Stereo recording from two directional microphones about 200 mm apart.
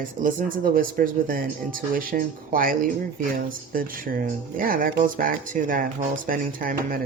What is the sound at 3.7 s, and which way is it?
Speech, 45° right (ahead or behind).